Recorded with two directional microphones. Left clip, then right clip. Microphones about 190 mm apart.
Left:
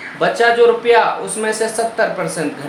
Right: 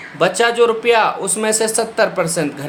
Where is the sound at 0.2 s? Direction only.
45° right (ahead or behind).